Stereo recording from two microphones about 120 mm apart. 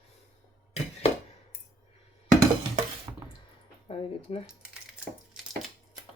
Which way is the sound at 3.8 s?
50° left (ahead or behind).